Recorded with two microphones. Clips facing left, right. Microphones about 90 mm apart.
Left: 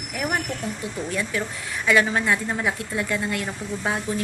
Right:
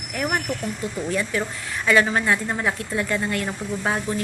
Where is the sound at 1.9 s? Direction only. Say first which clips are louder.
Right 1 dB; centre (ahead or behind).